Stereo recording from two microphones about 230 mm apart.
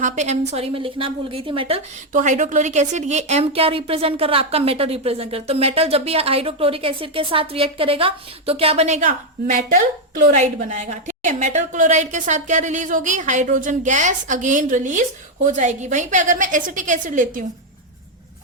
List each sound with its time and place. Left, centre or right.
0.0 s a woman's voice: right